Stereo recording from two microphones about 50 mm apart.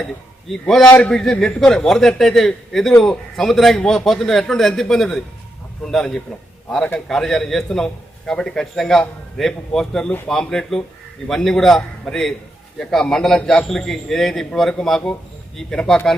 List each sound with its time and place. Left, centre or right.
0.7 s a man's voice: centre
1.5 s speech: centre
1.8 s a man's voice: centre